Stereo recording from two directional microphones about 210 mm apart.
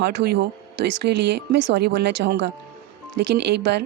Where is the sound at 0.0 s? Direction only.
50° right (ahead or behind).